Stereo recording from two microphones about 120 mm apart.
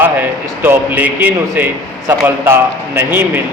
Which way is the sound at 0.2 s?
15° right (ahead or behind).